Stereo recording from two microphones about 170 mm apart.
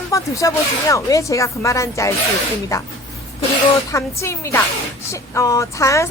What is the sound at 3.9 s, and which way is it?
Speech, 15° left (ahead or behind).